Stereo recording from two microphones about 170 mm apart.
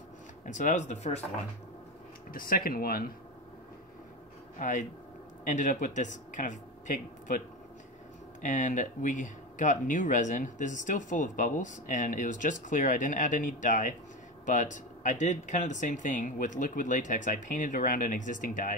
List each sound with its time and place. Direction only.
0.5 s speech: 45° left (ahead or behind)
2.3 s speech: 60° left (ahead or behind)
4.6 s speech: 50° left (ahead or behind)